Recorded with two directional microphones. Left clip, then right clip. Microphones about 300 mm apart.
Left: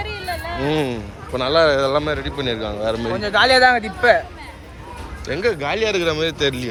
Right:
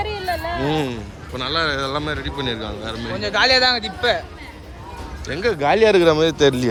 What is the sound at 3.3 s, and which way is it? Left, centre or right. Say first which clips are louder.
Speech: left 3 dB; left.